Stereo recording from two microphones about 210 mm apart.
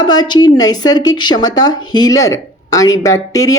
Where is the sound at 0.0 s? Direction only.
20° left (ahead or behind).